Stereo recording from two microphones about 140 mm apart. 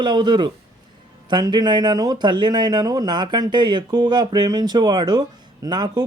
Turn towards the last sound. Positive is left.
turn(degrees=-30)  # may be behind; listen again after turning